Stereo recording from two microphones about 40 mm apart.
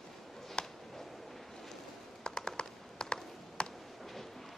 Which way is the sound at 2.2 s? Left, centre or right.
Centre.